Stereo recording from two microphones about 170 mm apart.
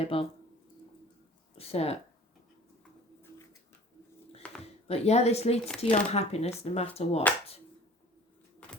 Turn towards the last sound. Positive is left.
turn(degrees=40)  # may be behind; listen again after turning